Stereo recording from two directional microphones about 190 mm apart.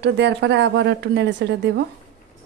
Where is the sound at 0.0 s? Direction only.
65° right (ahead or behind).